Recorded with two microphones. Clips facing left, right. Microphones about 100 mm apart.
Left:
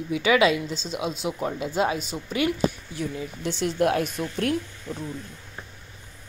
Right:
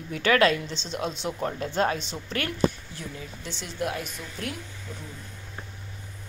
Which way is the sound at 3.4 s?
60° left (ahead or behind).